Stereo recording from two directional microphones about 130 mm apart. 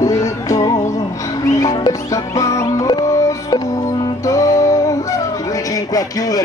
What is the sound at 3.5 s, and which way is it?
Music, 40° left (ahead or behind).